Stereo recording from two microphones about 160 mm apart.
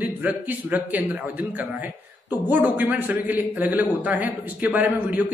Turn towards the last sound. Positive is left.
turn(degrees=-10)  # may be behind; listen again after turning